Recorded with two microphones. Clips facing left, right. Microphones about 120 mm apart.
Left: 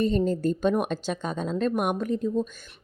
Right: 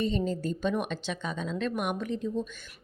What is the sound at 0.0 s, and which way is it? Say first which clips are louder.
Speech: left 6 dB; 45° left (ahead or behind).